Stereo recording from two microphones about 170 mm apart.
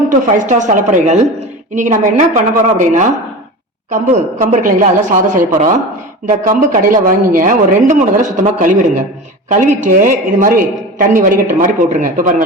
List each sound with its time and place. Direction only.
0.3 s a woman's voice: 50° right (ahead or behind)